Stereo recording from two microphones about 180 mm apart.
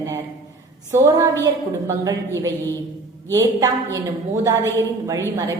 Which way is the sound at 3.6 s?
20° right (ahead or behind).